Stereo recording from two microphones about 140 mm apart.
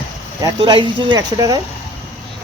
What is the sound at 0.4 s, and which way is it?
Speech, 35° right (ahead or behind).